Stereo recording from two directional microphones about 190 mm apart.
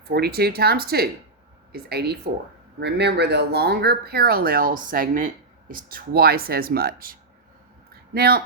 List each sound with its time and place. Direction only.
0.1 s speech: 55° right (ahead or behind)